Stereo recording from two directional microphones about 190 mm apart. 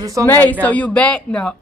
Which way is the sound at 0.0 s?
15° right (ahead or behind).